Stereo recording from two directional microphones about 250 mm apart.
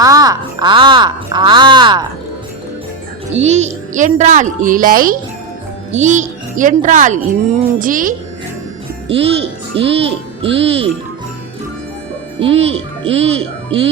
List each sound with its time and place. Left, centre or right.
0.0 s speech: centre
3.3 s a child's voice: right
12.5 s a child's voice: right